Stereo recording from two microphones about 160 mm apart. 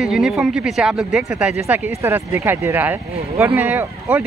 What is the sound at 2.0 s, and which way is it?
Speech, 15° right (ahead or behind).